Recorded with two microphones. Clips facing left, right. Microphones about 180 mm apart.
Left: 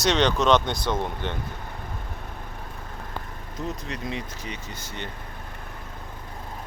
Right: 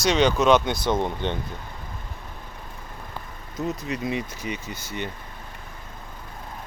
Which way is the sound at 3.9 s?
10° right (ahead or behind).